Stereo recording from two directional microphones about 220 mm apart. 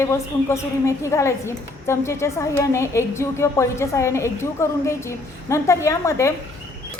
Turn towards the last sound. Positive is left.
turn(degrees=15)  # may be behind; listen again after turning